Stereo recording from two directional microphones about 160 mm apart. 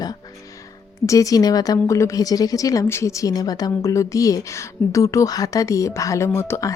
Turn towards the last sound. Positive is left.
turn(degrees=20)  # may be behind; listen again after turning